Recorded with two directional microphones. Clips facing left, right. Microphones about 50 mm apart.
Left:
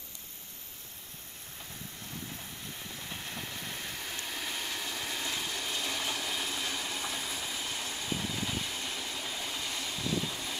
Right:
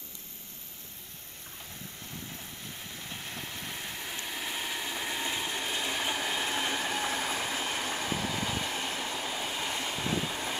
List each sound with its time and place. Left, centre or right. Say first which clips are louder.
3.0 s vehicle: right 1 dB; centre; by 8.5 s right
8.5 s train: right 4 dB; right